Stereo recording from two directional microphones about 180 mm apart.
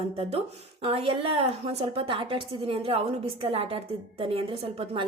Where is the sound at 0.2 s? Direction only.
35° right (ahead or behind).